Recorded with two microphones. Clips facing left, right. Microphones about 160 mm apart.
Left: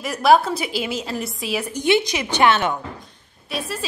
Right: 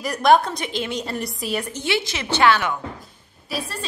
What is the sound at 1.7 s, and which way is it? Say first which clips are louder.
A woman's voice: left 6 dB; 15° left (ahead or behind).